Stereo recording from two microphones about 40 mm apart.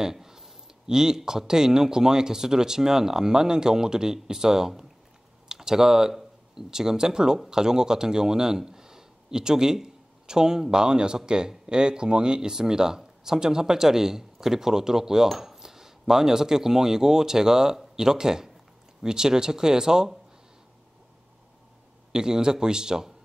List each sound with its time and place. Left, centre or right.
0.0 s speech: centre
22.1 s speech: centre